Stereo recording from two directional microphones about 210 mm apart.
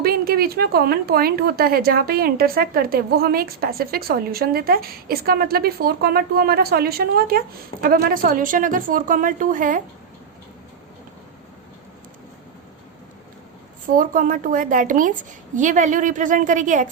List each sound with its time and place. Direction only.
0.0 s speech: 45° right (ahead or behind)
13.8 s a woman's voice: 40° right (ahead or behind)